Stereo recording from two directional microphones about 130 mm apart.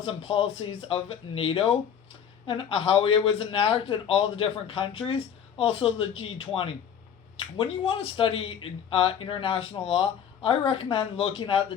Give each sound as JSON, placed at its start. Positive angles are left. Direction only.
{"t": 0.0, "sound": "speech", "side_deg": 45}